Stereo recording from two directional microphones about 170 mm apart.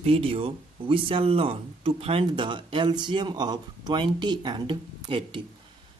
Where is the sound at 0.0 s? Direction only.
35° right (ahead or behind).